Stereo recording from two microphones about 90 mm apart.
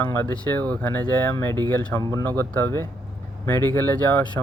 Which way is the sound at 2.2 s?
20° left (ahead or behind).